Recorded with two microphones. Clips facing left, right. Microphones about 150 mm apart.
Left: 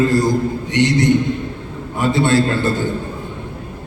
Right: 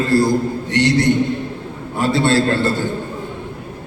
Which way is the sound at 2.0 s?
15° left (ahead or behind).